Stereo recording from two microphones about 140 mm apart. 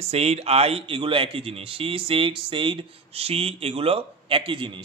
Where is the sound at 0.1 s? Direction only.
50° right (ahead or behind).